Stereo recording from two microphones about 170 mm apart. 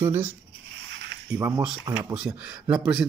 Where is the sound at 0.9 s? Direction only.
90° right.